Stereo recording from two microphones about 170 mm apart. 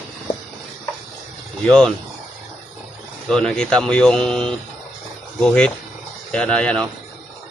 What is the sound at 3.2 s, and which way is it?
Speech, 5° left (ahead or behind).